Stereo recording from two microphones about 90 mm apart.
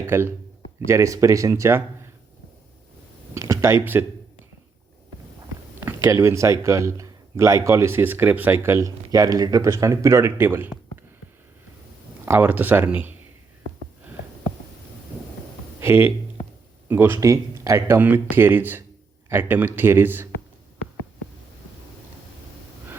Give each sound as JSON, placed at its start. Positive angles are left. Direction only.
{"t": 0.0, "sound": "a man's voice", "side_deg": -30}
{"t": 3.3, "sound": "speech", "side_deg": -40}
{"t": 5.8, "sound": "a man's voice", "side_deg": -30}
{"t": 8.7, "sound": "a man's voice", "side_deg": -40}
{"t": 12.2, "sound": "speech", "side_deg": -25}
{"t": 15.8, "sound": "a man's voice", "side_deg": -25}
{"t": 17.9, "sound": "speech", "side_deg": -20}